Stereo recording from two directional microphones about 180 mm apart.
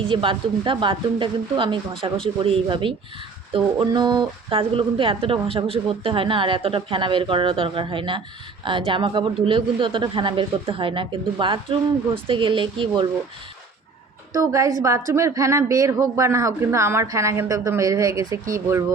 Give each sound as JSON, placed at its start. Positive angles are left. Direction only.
{"t": 0.0, "sound": "speech", "side_deg": -30}
{"t": 14.3, "sound": "a woman's voice", "side_deg": -20}